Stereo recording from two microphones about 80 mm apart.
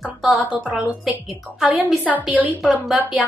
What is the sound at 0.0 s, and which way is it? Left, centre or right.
Music, centre.